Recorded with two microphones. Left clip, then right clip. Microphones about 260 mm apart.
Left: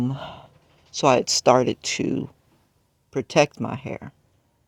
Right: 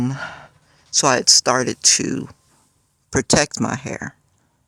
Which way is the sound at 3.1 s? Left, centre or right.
Right.